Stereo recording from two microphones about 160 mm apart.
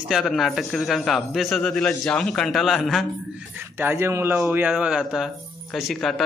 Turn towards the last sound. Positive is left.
turn(degrees=0)  # may be behind; listen again after turning